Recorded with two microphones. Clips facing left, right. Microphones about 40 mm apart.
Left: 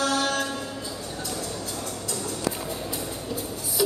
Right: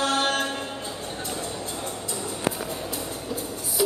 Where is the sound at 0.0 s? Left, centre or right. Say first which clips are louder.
Right 1 dB; right.